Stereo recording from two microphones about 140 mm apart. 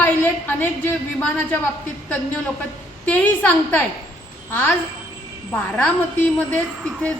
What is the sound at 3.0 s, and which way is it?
A woman's voice, 10° left (ahead or behind).